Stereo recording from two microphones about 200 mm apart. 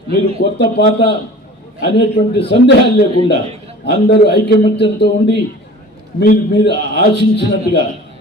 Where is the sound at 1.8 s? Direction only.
60° left (ahead or behind).